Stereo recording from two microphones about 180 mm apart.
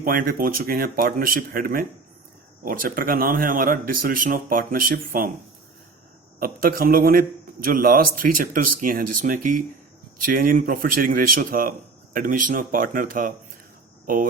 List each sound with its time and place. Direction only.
0.0 s a man's voice: 50° right (ahead or behind)
6.4 s a man's voice: 55° right (ahead or behind)